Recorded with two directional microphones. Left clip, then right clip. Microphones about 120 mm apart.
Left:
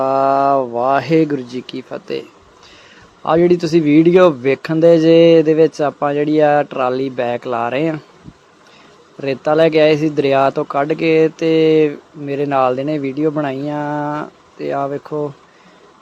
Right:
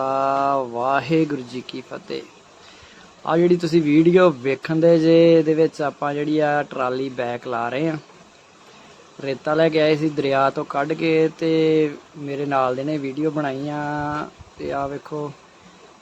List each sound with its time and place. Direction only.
0.0 s speech: 30° left (ahead or behind)
3.2 s speech: 30° left (ahead or behind)
9.2 s speech: 30° left (ahead or behind)